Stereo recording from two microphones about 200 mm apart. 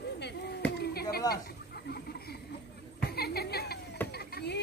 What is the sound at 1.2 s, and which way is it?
Chatter, 20° left (ahead or behind).